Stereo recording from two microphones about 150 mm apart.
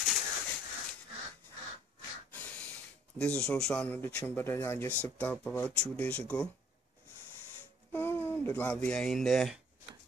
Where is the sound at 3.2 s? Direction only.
5° left (ahead or behind).